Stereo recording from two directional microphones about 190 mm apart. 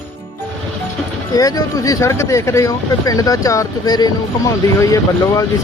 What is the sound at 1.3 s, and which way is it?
Speech, 20° left (ahead or behind).